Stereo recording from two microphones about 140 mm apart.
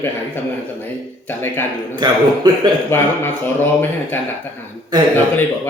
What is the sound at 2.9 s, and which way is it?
Speech, 15° left (ahead or behind).